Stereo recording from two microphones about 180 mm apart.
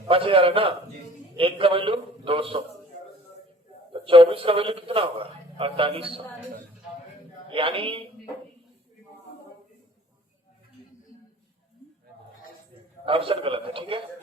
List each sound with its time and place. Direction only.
0.1 s a man's voice: 30° right (ahead or behind)
3.9 s a man's voice: 30° right (ahead or behind)
7.5 s a man's voice: 30° right (ahead or behind)
13.1 s a man's voice: 30° right (ahead or behind)